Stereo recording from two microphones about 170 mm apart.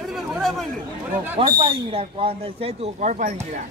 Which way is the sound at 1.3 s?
30° right (ahead or behind).